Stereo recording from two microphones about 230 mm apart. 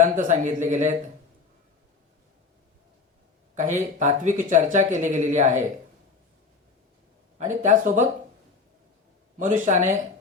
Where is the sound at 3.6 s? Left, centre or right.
Right.